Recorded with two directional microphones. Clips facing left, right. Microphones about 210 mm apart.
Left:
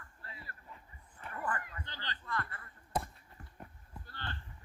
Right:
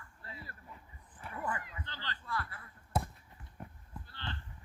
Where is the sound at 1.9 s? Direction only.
15° left (ahead or behind).